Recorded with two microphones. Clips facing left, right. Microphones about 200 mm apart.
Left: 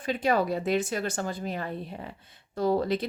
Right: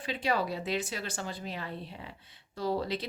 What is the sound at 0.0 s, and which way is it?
A woman's voice, 50° left (ahead or behind).